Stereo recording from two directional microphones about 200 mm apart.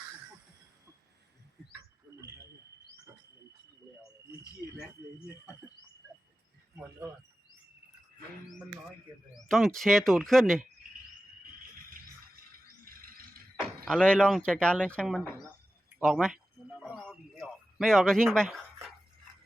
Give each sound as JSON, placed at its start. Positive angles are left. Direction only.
{"t": 9.5, "sound": "speech", "side_deg": 0}
{"t": 12.5, "sound": "music", "side_deg": -45}
{"t": 13.7, "sound": "speech", "side_deg": 5}
{"t": 16.8, "sound": "a sound", "side_deg": 0}
{"t": 17.4, "sound": "a man's voice", "side_deg": 0}